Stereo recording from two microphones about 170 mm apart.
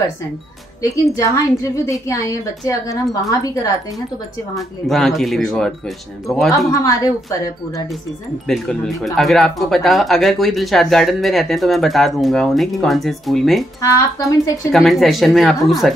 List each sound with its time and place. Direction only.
0.8 s a woman's voice: 20° left (ahead or behind)
4.6 s speech: centre (ahead or behind)
6.7 s a woman's voice: 20° left (ahead or behind)
8.5 s speech: centre (ahead or behind)
13.7 s a woman's voice: 20° left (ahead or behind)
14.7 s speech: centre (ahead or behind)